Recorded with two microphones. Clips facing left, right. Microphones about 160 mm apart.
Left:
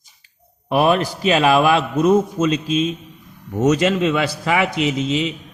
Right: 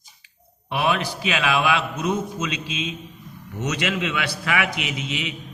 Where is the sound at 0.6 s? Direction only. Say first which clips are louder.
Left 7 dB; 40° left (ahead or behind).